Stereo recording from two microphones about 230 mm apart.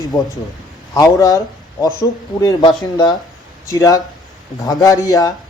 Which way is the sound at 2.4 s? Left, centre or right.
Centre.